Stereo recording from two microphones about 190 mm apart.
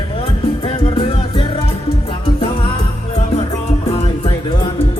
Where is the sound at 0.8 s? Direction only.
30° left (ahead or behind).